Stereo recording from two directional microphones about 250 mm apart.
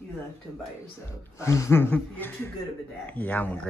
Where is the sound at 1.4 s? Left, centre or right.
Centre.